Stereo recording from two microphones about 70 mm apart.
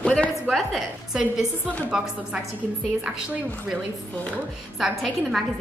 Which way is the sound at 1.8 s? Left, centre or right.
Centre.